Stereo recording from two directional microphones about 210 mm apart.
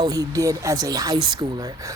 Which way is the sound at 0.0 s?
15° right (ahead or behind).